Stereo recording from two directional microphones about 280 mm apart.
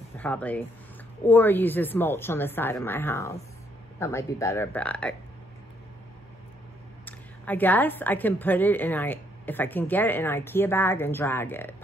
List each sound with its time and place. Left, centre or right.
0.2 s a woman's voice: centre
7.1 s a woman's voice: centre